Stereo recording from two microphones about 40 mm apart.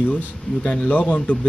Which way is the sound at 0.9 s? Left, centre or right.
Left.